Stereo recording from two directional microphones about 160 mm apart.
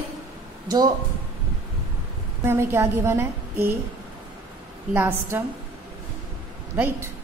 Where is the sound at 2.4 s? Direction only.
15° right (ahead or behind).